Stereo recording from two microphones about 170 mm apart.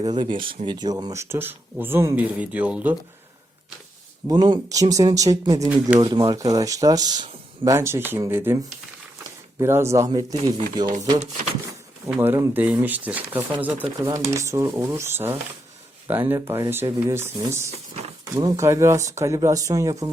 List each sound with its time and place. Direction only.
0.0 s speech: 25° right (ahead or behind); by 2.9 s 10° right (ahead or behind)
4.3 s speech: 25° right (ahead or behind)
5.6 s speech: 10° right (ahead or behind)
6.0 s speech: 25° right (ahead or behind)
9.6 s speech: 15° right (ahead or behind)
12.1 s speech: 10° right (ahead or behind)
17.7 s a sound: 35° right (ahead or behind)
18.4 s speech: 15° right (ahead or behind)